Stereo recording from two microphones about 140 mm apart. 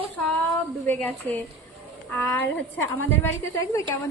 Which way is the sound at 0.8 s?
15° left (ahead or behind).